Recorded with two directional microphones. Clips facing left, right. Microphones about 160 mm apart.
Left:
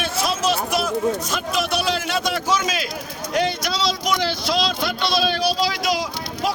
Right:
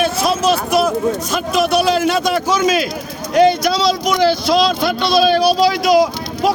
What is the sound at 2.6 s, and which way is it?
A man's voice, 55° right (ahead or behind).